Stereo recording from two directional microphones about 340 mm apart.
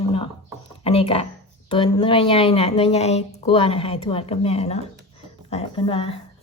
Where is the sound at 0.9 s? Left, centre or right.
Centre.